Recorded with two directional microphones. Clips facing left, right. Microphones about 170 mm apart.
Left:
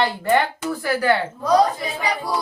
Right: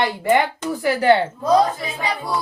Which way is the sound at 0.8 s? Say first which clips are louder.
Right 4 dB; 25° right (ahead or behind).